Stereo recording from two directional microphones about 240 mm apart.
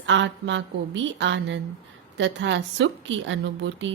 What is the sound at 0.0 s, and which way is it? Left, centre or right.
A woman's voice, right.